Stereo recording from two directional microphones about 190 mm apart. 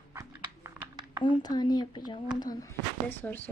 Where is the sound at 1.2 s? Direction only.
25° left (ahead or behind).